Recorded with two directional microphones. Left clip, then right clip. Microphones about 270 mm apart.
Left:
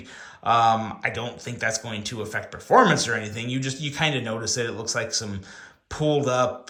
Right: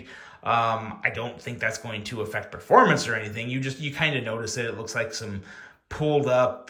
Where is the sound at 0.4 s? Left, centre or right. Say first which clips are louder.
Left 4 dB; centre.